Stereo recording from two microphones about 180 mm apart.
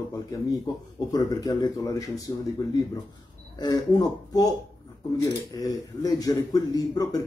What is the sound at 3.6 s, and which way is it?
A man's voice, 20° left (ahead or behind).